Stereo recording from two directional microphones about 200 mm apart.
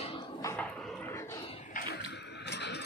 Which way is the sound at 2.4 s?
60° left (ahead or behind).